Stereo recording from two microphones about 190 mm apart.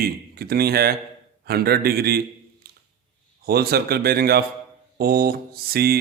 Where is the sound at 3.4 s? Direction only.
55° right (ahead or behind).